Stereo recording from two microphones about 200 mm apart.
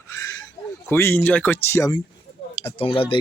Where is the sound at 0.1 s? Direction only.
15° left (ahead or behind).